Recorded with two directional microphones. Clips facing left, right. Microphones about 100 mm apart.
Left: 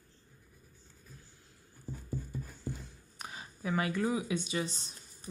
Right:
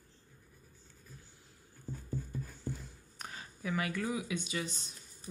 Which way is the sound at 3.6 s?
30° left (ahead or behind).